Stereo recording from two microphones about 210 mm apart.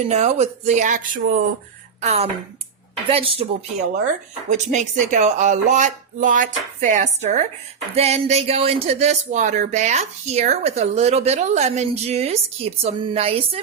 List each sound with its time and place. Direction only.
0.1 s speech: 35° right (ahead or behind)
4.4 s speech: 35° right (ahead or behind)